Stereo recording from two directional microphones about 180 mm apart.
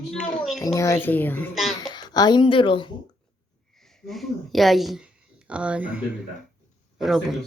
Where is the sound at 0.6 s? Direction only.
15° left (ahead or behind).